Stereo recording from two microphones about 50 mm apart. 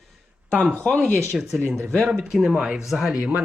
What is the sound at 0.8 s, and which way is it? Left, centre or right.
Speech, centre.